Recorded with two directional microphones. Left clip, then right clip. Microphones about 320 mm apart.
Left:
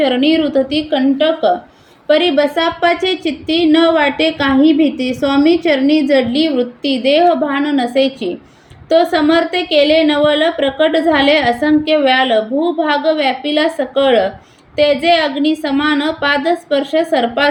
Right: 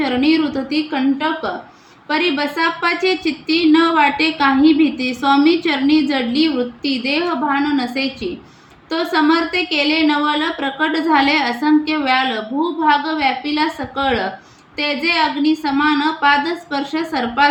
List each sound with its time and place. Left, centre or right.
0.0 s a woman's voice: centre